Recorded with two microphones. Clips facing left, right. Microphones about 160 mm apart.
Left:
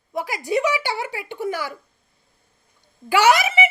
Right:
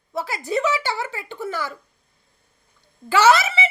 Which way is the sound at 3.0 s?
15° left (ahead or behind).